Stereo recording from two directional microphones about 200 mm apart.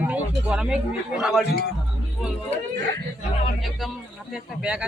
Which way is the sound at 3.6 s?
Centre (ahead or behind).